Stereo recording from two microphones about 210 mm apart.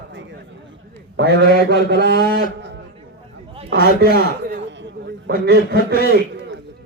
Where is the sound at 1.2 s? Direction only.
55° right (ahead or behind).